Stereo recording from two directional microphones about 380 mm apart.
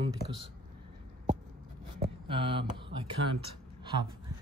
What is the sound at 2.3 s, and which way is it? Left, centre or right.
Speech, centre.